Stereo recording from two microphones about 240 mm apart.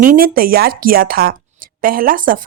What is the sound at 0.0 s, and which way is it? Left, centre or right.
A woman's voice, right.